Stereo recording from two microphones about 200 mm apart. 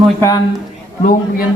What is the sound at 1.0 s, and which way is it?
Speech, 45° left (ahead or behind).